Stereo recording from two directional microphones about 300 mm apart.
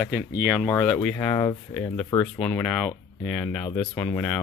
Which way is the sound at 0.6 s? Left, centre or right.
Centre.